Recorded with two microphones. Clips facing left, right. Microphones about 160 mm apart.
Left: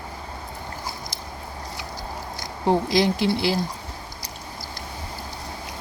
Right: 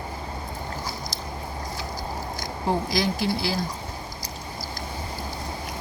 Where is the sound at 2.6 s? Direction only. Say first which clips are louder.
Left 5 dB; 25° left (ahead or behind).